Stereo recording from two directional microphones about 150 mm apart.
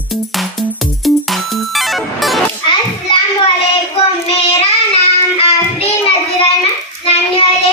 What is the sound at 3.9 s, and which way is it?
Child singing, 40° left (ahead or behind).